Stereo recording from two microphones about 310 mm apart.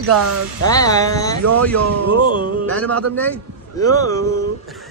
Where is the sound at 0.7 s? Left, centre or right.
Centre.